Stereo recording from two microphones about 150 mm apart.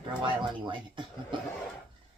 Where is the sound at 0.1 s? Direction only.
30° right (ahead or behind).